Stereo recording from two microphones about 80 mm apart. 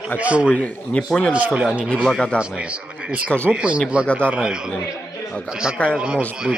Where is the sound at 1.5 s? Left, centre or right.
Centre.